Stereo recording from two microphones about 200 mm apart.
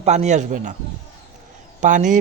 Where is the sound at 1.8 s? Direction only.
40° right (ahead or behind).